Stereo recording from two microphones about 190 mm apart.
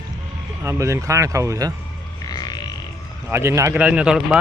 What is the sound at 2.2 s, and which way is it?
Music, 20° left (ahead or behind).